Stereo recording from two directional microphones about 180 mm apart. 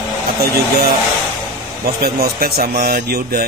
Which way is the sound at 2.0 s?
60° right (ahead or behind).